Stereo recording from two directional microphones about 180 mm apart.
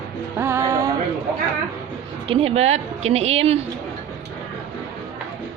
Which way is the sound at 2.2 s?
30° right (ahead or behind).